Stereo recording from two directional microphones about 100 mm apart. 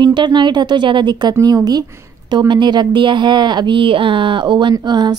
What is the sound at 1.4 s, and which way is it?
A woman's voice, 40° right (ahead or behind).